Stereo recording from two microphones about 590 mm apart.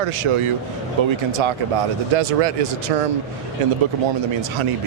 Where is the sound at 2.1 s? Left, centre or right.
Right.